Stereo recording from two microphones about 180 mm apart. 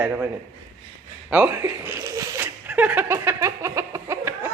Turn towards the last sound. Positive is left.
turn(degrees=-15)  # may be behind; listen again after turning